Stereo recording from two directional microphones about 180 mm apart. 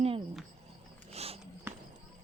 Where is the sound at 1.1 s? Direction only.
35° right (ahead or behind).